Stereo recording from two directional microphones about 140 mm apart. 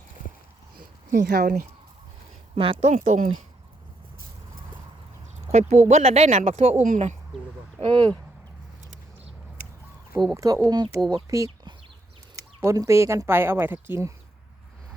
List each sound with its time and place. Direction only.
1.1 s speech: 90° right
2.6 s speech: 40° right (ahead or behind)
2.9 s speech: 55° right (ahead or behind)
5.5 s speech: 50° right (ahead or behind)
6.8 s speech: 65° right (ahead or behind)
7.8 s speech: 35° right (ahead or behind)
10.3 s speech: 25° right (ahead or behind)